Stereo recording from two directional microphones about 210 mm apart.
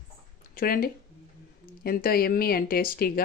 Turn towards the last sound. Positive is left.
turn(degrees=45)  # may be behind; listen again after turning